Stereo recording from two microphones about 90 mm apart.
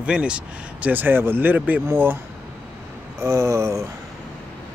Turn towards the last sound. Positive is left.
turn(degrees=-35)  # may be behind; listen again after turning